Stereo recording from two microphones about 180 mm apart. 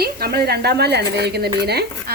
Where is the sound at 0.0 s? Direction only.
60° right (ahead or behind).